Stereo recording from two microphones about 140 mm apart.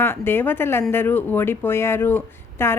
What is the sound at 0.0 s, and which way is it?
Speech, 15° left (ahead or behind).